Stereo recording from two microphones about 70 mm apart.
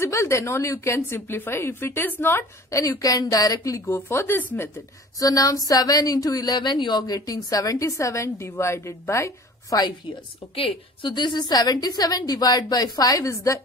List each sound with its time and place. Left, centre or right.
0.0 s a woman's voice: left
2.7 s a woman's voice: left
4.4 s speech: left
5.2 s a woman's voice: left
7.2 s a woman's voice: left
11.1 s a woman's voice: left